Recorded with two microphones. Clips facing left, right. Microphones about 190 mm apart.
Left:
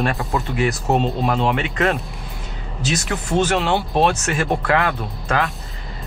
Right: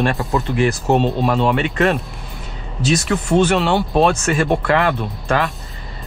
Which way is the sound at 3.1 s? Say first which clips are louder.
Right 3 dB; centre (ahead or behind).